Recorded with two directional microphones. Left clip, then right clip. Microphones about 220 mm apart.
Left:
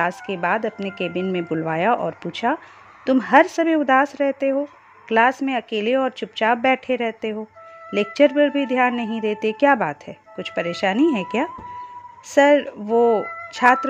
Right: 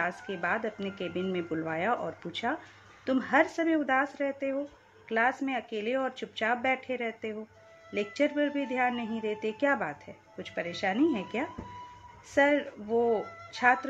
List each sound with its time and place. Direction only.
0.0 s speech: 40° left (ahead or behind)